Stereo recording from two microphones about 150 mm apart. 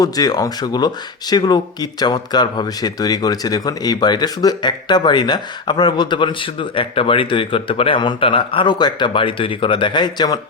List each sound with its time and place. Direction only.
0.0 s speech: 25° left (ahead or behind)